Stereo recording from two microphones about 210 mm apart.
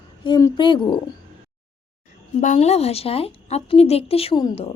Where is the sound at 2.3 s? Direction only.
35° left (ahead or behind).